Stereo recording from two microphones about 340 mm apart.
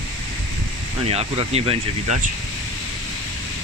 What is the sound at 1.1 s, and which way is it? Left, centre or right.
Speech, centre.